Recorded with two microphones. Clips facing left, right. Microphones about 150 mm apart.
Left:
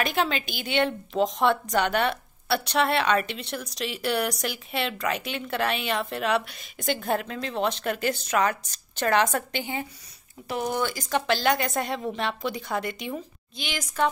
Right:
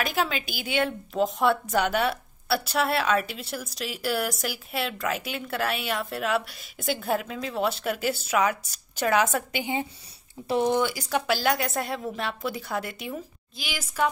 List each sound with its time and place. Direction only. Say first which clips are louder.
0.0 s a woman's voice: left 1 dB; 5° right (ahead or behind)
10.5 s speech: right 5 dB; 30° right (ahead or behind)
10.8 s a woman's voice: right 1 dB; 10° right (ahead or behind)